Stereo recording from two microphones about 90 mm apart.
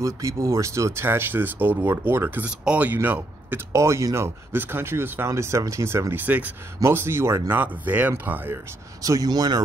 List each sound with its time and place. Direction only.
0.0 s speech: 35° right (ahead or behind); by 3.6 s 20° right (ahead or behind)
3.7 s speech: 35° right (ahead or behind)
6.2 s speech: 15° right (ahead or behind)
9.0 s speech: 40° right (ahead or behind)